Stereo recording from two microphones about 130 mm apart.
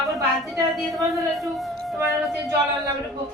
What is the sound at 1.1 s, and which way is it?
A man's voice, centre (ahead or behind).